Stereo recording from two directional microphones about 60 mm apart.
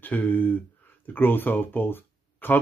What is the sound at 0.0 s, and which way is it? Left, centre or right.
Speech, left.